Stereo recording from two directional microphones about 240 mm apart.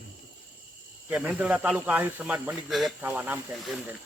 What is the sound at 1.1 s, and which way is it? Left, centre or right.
A man's voice, centre.